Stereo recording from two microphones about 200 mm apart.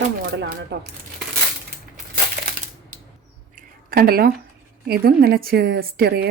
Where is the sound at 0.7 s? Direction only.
55° right (ahead or behind).